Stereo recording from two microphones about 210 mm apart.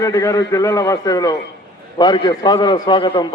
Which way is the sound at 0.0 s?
15° left (ahead or behind).